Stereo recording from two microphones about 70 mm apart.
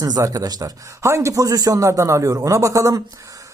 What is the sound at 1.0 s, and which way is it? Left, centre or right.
Speech, right.